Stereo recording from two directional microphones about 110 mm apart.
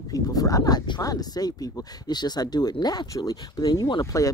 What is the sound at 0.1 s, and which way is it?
Speech, 35° left (ahead or behind).